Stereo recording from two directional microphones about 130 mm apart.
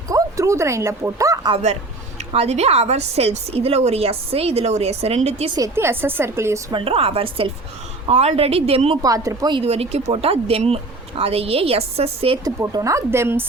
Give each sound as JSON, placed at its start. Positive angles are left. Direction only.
{"t": 0.1, "sound": "bow-wow", "side_deg": -25}
{"t": 2.1, "sound": "speech", "side_deg": -55}
{"t": 5.5, "sound": "a woman's voice", "side_deg": -20}
{"t": 6.7, "sound": "speech", "side_deg": -45}
{"t": 8.0, "sound": "speech", "side_deg": -55}
{"t": 9.0, "sound": "a woman's voice", "side_deg": -25}
{"t": 9.6, "sound": "speech", "side_deg": -50}
{"t": 12.5, "sound": "a woman's voice", "side_deg": -25}